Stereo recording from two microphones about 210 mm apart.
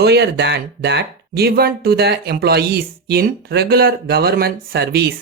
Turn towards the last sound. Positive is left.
turn(degrees=-45)  # may be behind; listen again after turning